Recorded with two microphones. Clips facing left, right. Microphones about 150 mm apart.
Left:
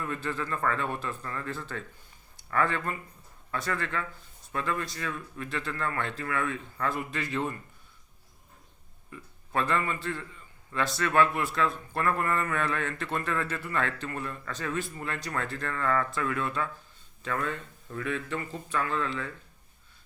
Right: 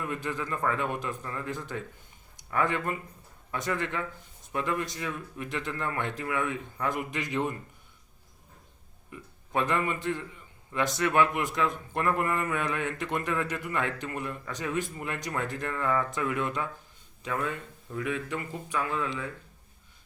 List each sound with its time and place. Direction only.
0.0 s a man's voice: 15° right (ahead or behind)
9.0 s a man's voice: 15° right (ahead or behind)